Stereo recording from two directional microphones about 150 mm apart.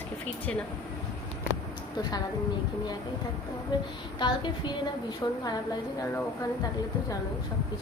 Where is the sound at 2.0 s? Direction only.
25° left (ahead or behind).